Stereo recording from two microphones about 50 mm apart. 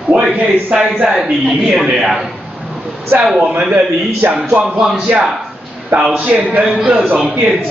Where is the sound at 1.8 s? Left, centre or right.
Centre.